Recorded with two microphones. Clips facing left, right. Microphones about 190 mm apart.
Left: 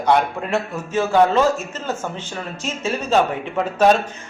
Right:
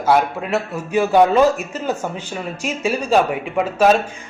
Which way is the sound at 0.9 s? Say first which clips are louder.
Right 2 dB; 15° right (ahead or behind).